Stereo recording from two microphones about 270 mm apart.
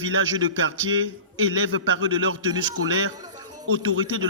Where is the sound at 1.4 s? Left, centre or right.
Right.